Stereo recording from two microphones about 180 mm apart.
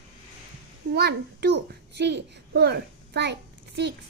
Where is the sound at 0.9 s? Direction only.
65° right (ahead or behind).